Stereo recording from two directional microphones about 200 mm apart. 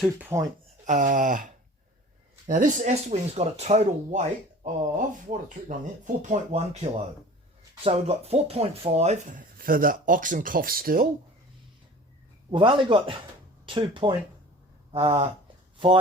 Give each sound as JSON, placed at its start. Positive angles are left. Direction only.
{"t": 0.0, "sound": "speech", "side_deg": -10}
{"t": 0.9, "sound": "speech", "side_deg": -40}
{"t": 2.5, "sound": "speech", "side_deg": -40}
{"t": 7.9, "sound": "speech", "side_deg": -30}
{"t": 12.5, "sound": "a man's voice", "side_deg": -25}